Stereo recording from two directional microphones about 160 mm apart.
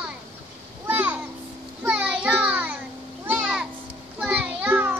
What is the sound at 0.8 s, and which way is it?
Children playing, 10° right (ahead or behind).